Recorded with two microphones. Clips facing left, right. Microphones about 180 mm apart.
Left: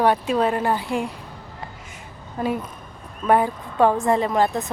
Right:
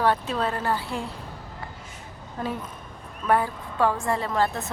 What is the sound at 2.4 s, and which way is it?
A woman's voice, 15° left (ahead or behind).